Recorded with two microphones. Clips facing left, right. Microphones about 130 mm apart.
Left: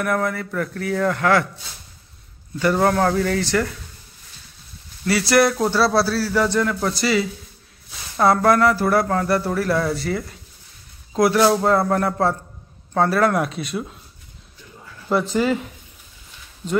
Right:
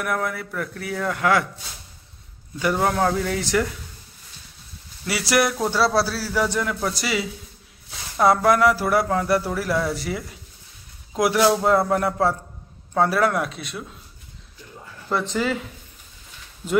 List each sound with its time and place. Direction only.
0.0 s speech: 5° right (ahead or behind)
5.0 s speech: 10° right (ahead or behind)
15.0 s speech: 5° left (ahead or behind)